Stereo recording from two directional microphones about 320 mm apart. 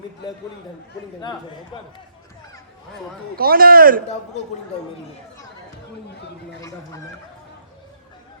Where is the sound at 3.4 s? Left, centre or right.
Right.